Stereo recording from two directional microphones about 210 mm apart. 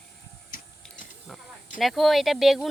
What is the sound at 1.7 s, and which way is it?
Speech, centre (ahead or behind).